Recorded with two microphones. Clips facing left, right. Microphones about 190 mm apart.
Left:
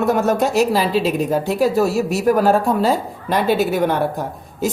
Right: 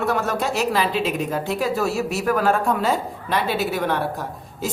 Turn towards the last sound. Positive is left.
turn(degrees=45)  # may be behind; listen again after turning